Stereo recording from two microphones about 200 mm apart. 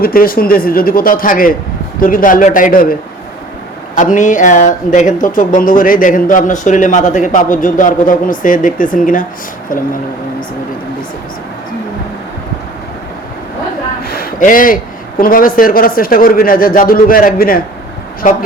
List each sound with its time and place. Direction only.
0.0 s speech: 45° left (ahead or behind)
3.9 s speech: 40° left (ahead or behind)
14.0 s a sound: 50° left (ahead or behind)
15.2 s speech: 45° left (ahead or behind)